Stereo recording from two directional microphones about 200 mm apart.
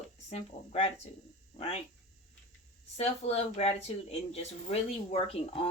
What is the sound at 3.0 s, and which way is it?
Speech, 30° left (ahead or behind).